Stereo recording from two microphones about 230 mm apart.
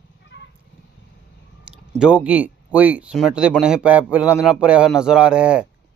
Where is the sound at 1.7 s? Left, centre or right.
Centre.